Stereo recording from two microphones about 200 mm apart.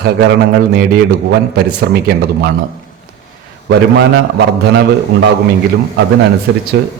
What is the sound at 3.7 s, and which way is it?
Speech, 60° right (ahead or behind).